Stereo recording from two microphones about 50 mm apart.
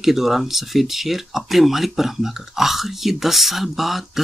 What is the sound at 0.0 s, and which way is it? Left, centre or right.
Speech, centre.